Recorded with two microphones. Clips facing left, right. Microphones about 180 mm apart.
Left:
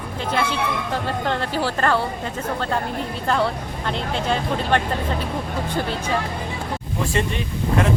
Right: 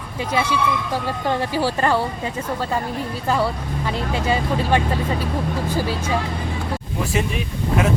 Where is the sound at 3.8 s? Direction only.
5° right (ahead or behind).